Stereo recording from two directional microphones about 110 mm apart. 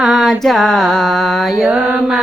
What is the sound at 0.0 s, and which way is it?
Mantra, 5° right (ahead or behind).